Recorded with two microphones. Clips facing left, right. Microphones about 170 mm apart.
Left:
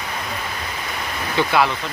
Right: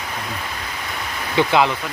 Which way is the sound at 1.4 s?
20° right (ahead or behind).